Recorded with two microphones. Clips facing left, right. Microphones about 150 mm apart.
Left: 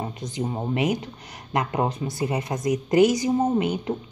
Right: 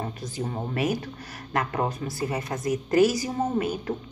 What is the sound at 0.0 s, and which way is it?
A woman's voice, 15° left (ahead or behind).